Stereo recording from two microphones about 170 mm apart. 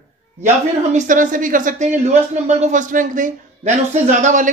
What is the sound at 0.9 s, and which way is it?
Speech, 50° right (ahead or behind).